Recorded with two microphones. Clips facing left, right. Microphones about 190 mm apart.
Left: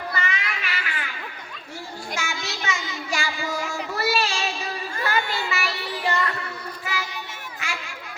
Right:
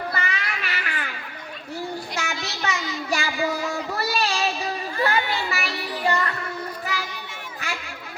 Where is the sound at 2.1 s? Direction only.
35° right (ahead or behind).